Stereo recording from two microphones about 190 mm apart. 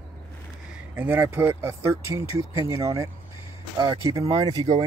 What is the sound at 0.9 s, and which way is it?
Speech, 10° right (ahead or behind).